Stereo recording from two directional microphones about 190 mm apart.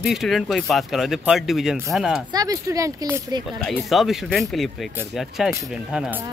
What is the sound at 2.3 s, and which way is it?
Speech, 20° right (ahead or behind).